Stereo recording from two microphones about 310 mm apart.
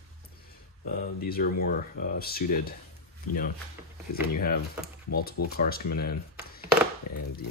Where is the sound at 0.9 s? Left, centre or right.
Left.